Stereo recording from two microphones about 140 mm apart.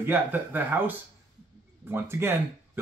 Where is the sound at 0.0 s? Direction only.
15° right (ahead or behind).